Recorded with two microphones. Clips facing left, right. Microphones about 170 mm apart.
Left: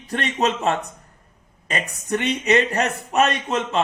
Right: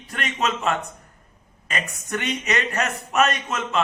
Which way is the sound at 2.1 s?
30° left (ahead or behind).